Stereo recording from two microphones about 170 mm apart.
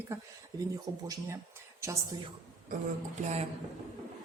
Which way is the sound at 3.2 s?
40° right (ahead or behind).